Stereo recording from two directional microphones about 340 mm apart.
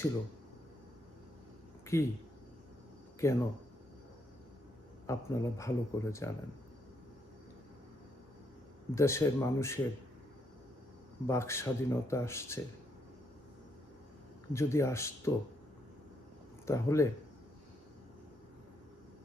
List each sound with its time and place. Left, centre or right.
1.9 s speech: centre
3.2 s speech: centre
5.0 s speech: centre
9.0 s speech: centre
11.3 s speech: centre
14.5 s speech: centre
16.6 s speech: centre